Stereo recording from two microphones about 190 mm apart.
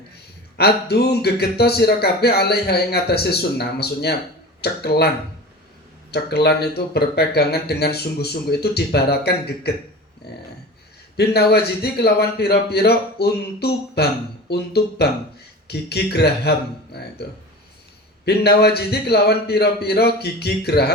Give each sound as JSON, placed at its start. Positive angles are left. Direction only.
{"t": 0.5, "sound": "speech", "side_deg": 55}
{"t": 10.2, "sound": "a sound", "side_deg": 60}
{"t": 11.2, "sound": "speech", "side_deg": 55}
{"t": 18.3, "sound": "speech", "side_deg": 55}